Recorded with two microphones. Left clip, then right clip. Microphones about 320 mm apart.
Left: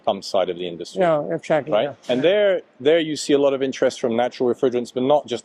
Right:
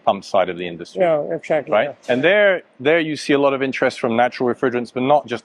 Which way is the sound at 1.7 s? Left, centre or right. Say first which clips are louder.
Right 3 dB; centre.